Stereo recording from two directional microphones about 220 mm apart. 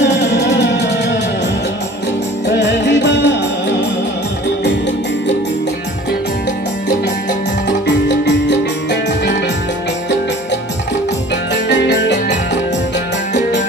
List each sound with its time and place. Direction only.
0.0 s music: 50° left (ahead or behind)
2.4 s music: 55° left (ahead or behind)
11.5 s music: 55° left (ahead or behind)